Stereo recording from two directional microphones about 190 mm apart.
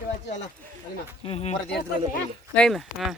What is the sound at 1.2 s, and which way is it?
Speech, 30° left (ahead or behind).